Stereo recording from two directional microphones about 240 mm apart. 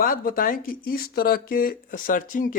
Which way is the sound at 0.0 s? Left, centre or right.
Left.